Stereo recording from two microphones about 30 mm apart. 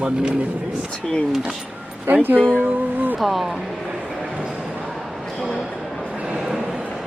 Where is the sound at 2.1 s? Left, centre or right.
Right.